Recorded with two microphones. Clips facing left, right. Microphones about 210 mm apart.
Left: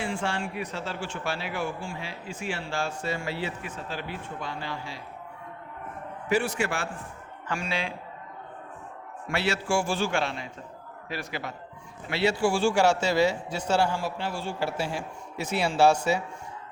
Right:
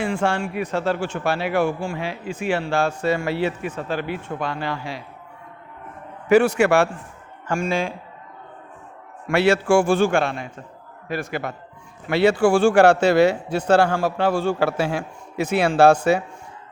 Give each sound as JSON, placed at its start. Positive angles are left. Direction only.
{"t": 0.0, "sound": "a man's voice", "side_deg": -60}
{"t": 6.2, "sound": "a man's voice", "side_deg": -65}
{"t": 7.4, "sound": "a man's voice", "side_deg": -45}
{"t": 9.4, "sound": "a man's voice", "side_deg": -55}